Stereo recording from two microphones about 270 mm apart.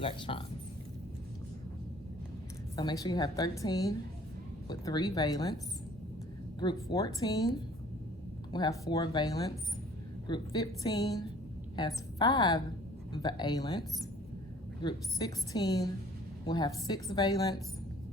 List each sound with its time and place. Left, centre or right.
0.0 s speech: centre
2.7 s a woman's voice: centre
6.6 s a woman's voice: centre
8.5 s a woman's voice: centre